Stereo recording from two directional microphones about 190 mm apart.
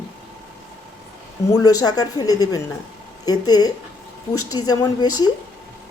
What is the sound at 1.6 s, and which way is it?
Speech, 20° left (ahead or behind).